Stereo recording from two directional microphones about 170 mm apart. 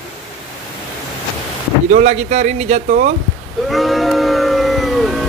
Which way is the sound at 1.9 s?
40° right (ahead or behind).